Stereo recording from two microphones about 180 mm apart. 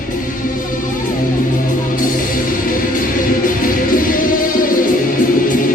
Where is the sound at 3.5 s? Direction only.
50° left (ahead or behind).